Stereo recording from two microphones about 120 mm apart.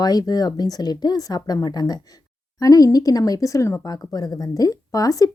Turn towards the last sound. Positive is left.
turn(degrees=30)  # may be behind; listen again after turning